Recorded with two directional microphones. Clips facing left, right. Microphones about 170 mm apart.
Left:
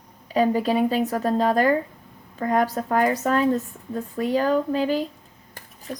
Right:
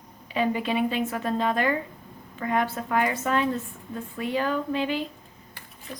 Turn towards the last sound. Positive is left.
turn(degrees=40)  # may be behind; listen again after turning